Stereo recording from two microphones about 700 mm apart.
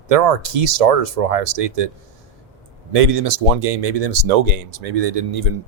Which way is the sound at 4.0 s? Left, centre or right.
Right.